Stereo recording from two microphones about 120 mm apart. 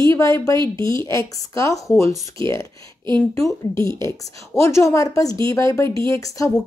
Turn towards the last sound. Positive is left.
turn(degrees=25)  # may be behind; listen again after turning